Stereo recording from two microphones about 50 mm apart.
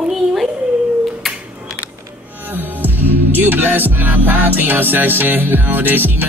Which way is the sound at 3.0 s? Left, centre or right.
Right.